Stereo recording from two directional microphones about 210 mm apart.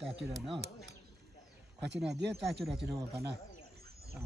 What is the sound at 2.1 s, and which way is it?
Speech, 55° right (ahead or behind).